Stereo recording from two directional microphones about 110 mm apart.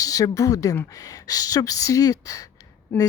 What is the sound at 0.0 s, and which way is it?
Speech, 30° left (ahead or behind).